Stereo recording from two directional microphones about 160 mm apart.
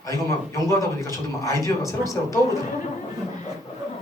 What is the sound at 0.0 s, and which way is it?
Speech, 20° left (ahead or behind).